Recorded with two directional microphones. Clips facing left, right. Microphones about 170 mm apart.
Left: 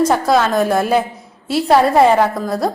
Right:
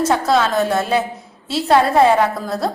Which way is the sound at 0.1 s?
Centre (ahead or behind).